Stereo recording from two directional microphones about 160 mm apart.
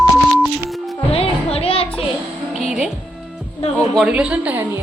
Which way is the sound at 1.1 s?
35° left (ahead or behind).